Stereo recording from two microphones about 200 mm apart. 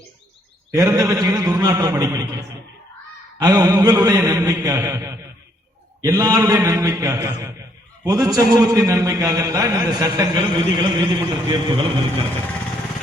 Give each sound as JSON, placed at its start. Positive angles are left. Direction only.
{"t": 0.8, "sound": "a man's voice", "side_deg": -15}
{"t": 3.3, "sound": "a sound", "side_deg": -20}
{"t": 8.0, "sound": "a man's voice", "side_deg": -20}